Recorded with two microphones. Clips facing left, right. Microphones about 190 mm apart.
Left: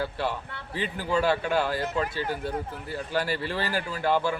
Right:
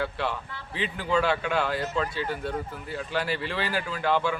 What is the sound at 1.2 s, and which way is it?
Speech, 40° left (ahead or behind).